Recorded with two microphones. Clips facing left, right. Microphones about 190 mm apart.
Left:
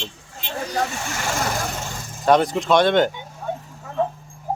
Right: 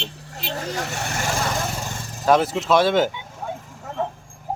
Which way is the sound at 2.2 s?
5° right (ahead or behind).